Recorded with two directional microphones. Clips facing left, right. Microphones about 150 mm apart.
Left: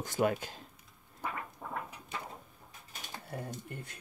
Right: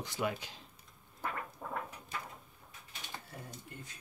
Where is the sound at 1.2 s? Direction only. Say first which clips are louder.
Even; centre (ahead or behind).